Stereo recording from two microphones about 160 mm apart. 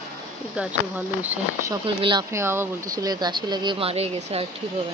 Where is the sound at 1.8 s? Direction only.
35° right (ahead or behind).